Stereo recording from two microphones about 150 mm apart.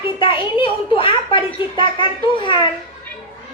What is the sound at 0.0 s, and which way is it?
Speech, 35° left (ahead or behind).